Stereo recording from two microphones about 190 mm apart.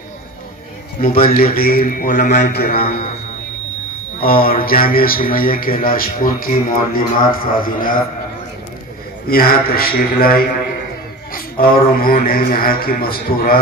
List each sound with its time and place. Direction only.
1.2 s speech: 50° left (ahead or behind)
4.3 s speech: 50° left (ahead or behind)
9.3 s speech: 50° left (ahead or behind)
11.3 s speech: 50° left (ahead or behind)